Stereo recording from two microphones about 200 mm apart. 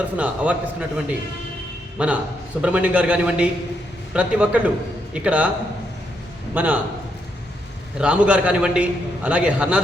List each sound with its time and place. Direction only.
0.2 s a man's voice: 5° right (ahead or behind)
6.5 s a man's voice: 5° right (ahead or behind)
7.9 s a man's voice: 5° right (ahead or behind)